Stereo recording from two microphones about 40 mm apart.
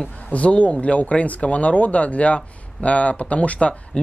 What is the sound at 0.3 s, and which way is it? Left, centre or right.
Speech, left.